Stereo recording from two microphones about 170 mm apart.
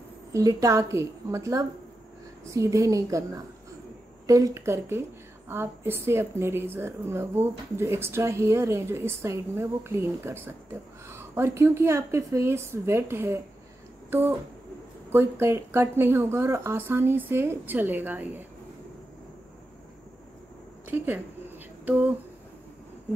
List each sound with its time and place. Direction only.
0.3 s a woman's voice: 20° right (ahead or behind)
15.0 s a woman's voice: 15° right (ahead or behind)
20.9 s a woman's voice: 10° right (ahead or behind)